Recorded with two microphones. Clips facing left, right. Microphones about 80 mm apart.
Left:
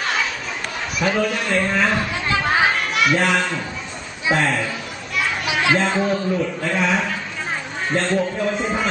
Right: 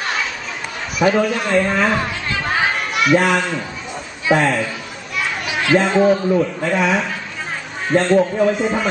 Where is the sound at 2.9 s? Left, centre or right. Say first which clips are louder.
Right 5 dB; centre.